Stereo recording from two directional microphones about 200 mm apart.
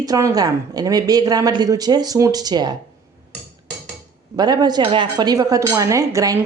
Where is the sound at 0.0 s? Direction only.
15° right (ahead or behind).